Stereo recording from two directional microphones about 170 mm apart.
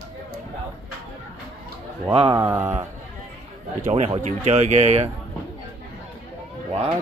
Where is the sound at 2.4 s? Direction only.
10° right (ahead or behind).